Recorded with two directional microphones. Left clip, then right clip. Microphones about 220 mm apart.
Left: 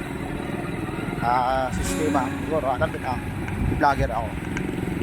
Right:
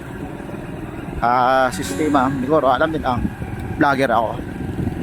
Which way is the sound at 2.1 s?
45° right (ahead or behind).